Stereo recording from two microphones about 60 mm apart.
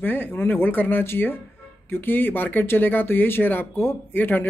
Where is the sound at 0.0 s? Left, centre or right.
Left.